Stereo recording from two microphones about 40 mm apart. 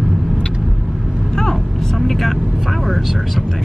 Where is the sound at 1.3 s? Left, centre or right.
Centre.